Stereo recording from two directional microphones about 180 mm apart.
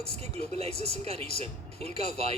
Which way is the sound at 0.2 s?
35° right (ahead or behind).